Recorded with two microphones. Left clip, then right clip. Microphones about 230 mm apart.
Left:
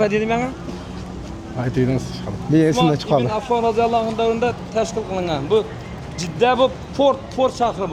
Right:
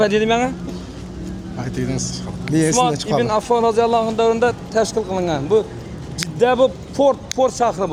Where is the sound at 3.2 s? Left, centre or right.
Centre.